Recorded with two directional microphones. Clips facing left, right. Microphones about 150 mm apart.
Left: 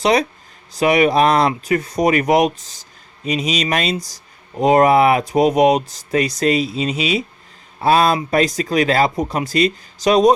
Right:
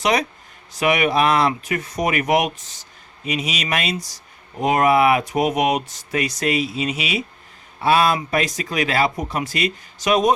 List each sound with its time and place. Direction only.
0.0 s speech: 30° left (ahead or behind)